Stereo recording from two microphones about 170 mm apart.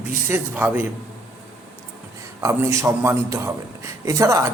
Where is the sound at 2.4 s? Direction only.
15° right (ahead or behind).